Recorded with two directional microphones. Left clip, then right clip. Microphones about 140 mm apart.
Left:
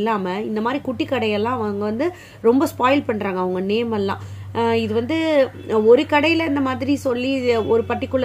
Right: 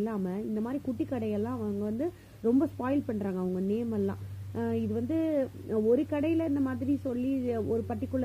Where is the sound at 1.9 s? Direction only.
25° right (ahead or behind).